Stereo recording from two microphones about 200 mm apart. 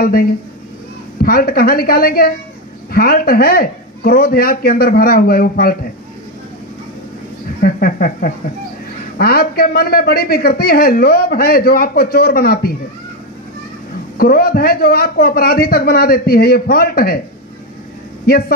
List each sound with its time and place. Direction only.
0.0 s a man's voice: 45° left (ahead or behind)
7.6 s a man's voice: 45° left (ahead or behind)
14.1 s a man's voice: 50° left (ahead or behind)